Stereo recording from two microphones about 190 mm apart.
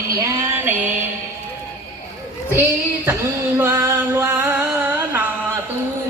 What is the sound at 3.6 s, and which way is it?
Music, 15° right (ahead or behind).